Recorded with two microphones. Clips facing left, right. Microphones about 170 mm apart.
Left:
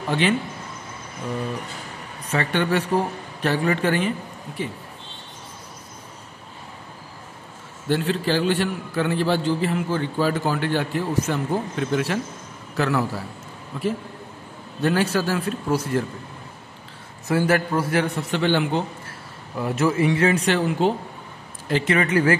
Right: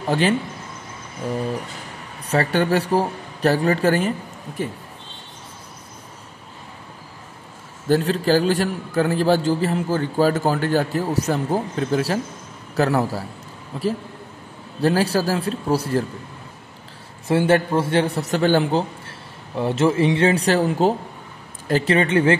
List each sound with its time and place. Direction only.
2.2 s a man's voice: 35° right (ahead or behind)
7.9 s a man's voice: 40° right (ahead or behind)
14.8 s a man's voice: 35° right (ahead or behind)
17.3 s a man's voice: 25° right (ahead or behind)
18.3 s a man's voice: 40° right (ahead or behind)
21.9 s a man's voice: 25° right (ahead or behind)